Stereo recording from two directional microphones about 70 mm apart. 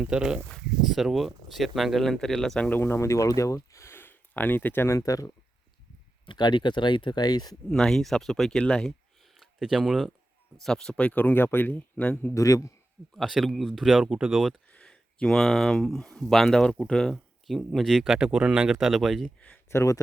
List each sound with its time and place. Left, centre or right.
0.0 s speech: centre
2.6 s speech: left
4.9 s a man's voice: left
6.3 s speech: left
7.7 s speech: centre
8.9 s a sound: centre
10.6 s speech: centre
12.3 s a man's voice: left
13.1 s speech: centre
14.7 s speech: centre
18.7 s speech: centre
19.6 s a man's voice: left